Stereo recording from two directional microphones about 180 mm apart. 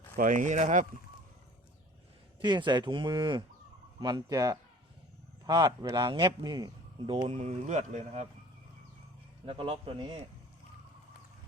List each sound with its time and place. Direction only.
0.2 s speech: 45° right (ahead or behind)
2.4 s a man's voice: 25° right (ahead or behind)
9.5 s a man's voice: 30° right (ahead or behind)